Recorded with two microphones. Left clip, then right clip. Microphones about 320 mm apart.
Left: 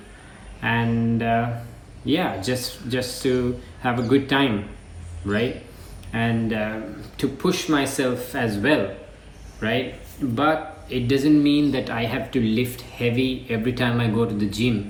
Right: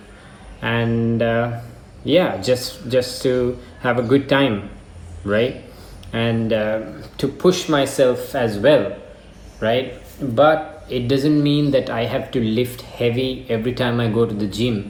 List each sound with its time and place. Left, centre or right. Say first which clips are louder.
0.6 s speech: right 2 dB; centre
6.1 s speech: right 5 dB; centre